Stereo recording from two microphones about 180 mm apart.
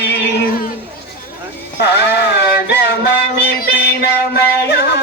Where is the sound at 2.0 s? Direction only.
70° left (ahead or behind).